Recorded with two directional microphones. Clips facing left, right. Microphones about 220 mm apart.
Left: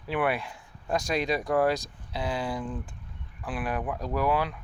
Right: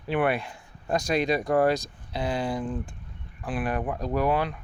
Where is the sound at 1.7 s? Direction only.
Centre (ahead or behind).